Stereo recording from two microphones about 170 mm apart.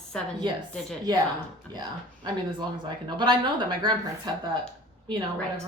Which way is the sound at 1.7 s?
25° right (ahead or behind).